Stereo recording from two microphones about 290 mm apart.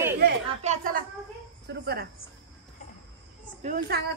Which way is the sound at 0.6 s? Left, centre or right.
Right.